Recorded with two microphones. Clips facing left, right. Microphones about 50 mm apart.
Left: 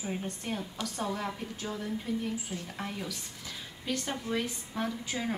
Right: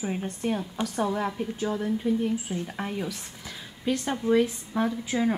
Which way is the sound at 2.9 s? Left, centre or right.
Centre.